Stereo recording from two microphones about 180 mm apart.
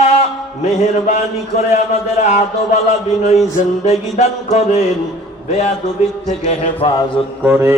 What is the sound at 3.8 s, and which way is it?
Mantra, 35° left (ahead or behind).